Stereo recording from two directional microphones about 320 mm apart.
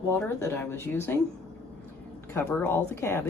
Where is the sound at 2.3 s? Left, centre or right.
Centre.